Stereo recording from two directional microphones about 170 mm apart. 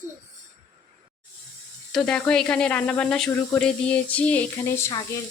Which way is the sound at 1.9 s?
5° left (ahead or behind).